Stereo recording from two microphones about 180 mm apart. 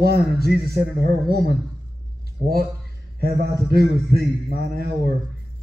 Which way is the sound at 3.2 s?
60° right (ahead or behind).